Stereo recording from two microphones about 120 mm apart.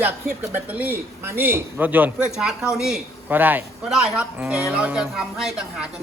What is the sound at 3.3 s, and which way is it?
Speech, 15° right (ahead or behind).